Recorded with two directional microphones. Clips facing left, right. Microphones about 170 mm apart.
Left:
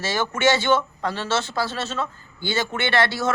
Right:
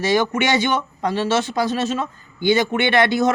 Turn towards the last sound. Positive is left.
turn(degrees=-15)  # may be behind; listen again after turning